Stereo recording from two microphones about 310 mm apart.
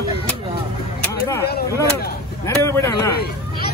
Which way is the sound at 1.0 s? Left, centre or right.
Centre.